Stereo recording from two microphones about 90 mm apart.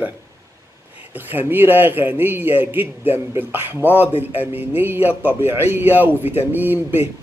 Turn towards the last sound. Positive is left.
turn(degrees=-25)  # may be behind; listen again after turning